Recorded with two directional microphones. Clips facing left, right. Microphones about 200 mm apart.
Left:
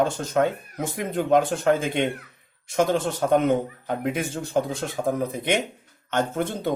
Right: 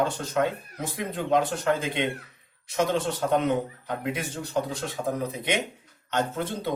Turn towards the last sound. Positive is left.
turn(degrees=50)  # may be behind; listen again after turning